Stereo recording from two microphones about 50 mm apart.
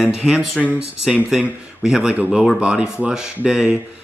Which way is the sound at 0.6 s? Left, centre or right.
Centre.